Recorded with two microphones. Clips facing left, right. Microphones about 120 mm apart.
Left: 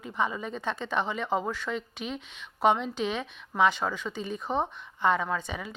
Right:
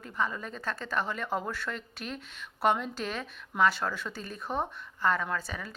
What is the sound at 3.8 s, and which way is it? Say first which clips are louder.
Speech: left 2 dB; 15° left (ahead or behind).